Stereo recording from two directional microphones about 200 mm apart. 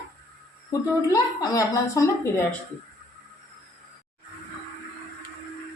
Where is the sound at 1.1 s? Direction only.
15° left (ahead or behind).